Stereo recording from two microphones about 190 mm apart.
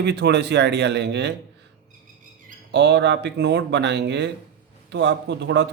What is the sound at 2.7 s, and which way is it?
A man's voice, 65° right (ahead or behind).